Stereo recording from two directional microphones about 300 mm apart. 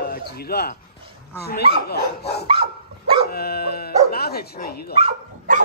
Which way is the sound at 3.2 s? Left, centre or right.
Left.